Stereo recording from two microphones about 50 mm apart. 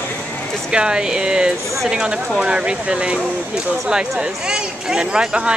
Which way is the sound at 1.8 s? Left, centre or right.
Centre.